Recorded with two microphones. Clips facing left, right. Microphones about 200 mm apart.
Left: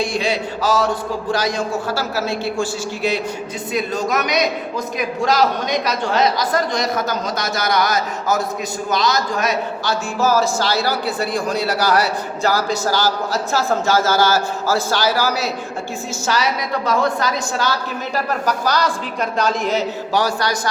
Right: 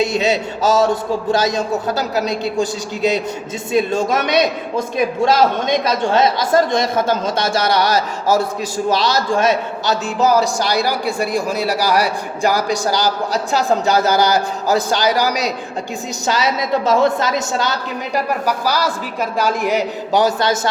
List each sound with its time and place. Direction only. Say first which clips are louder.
0.0 s a man's voice: right 4 dB; 20° right (ahead or behind)